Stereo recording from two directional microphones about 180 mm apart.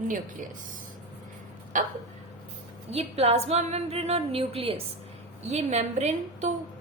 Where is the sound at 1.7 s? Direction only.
45° right (ahead or behind).